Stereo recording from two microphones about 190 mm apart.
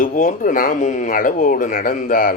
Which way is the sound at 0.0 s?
45° left (ahead or behind).